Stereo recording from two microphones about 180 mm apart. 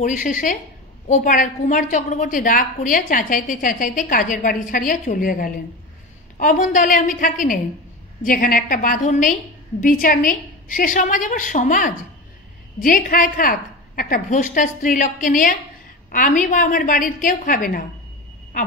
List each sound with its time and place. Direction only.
0.0 s a woman's voice: 45° left (ahead or behind)